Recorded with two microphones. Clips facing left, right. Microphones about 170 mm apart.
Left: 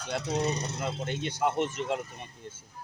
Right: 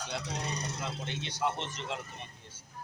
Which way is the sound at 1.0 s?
50° left (ahead or behind).